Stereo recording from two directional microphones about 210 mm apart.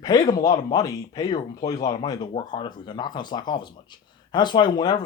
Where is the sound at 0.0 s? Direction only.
15° left (ahead or behind).